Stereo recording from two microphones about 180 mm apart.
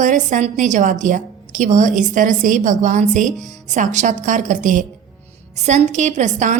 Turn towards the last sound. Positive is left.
turn(degrees=-40)  # may be behind; listen again after turning